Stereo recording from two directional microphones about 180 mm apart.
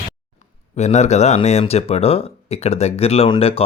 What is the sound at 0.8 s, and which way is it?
Speech, 40° left (ahead or behind).